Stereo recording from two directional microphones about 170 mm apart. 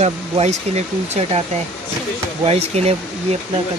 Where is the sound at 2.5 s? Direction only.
35° right (ahead or behind).